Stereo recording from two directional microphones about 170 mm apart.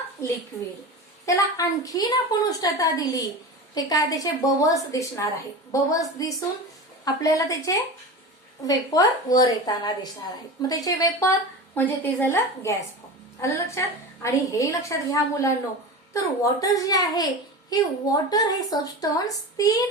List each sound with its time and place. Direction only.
1.2 s a woman's voice: 20° left (ahead or behind)